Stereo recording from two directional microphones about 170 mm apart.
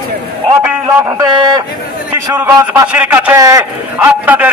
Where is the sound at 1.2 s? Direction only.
20° right (ahead or behind).